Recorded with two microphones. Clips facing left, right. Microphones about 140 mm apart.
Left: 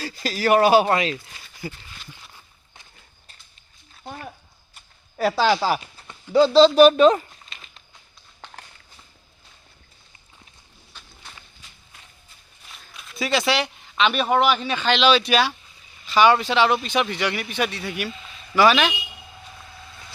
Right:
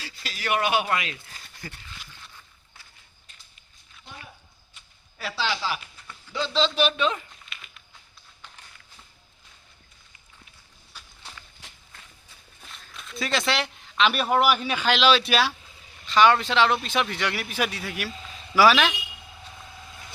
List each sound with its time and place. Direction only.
0.0 s speech: 40° left (ahead or behind)
1.6 s speech: 15° left (ahead or behind)
3.9 s a sound: 45° left (ahead or behind)
5.1 s speech: 45° left (ahead or behind)
10.9 s walk: 10° right (ahead or behind)
12.7 s a man's voice: centre (ahead or behind)